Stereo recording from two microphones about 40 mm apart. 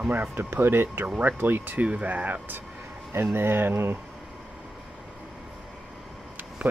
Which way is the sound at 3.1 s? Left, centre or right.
Right.